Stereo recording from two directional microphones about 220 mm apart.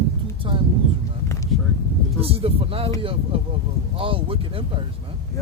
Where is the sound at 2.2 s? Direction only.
25° right (ahead or behind).